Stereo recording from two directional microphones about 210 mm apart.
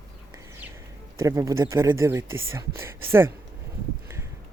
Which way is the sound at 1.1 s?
15° right (ahead or behind).